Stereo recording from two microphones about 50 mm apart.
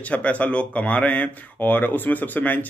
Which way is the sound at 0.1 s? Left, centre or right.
Left.